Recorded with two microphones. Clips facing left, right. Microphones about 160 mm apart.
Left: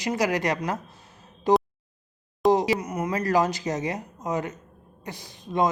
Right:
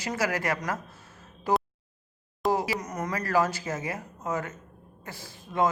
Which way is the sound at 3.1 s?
20° left (ahead or behind).